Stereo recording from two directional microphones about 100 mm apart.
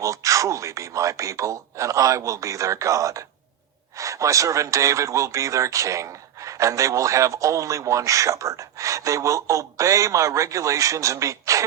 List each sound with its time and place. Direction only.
0.0 s speech: 35° right (ahead or behind)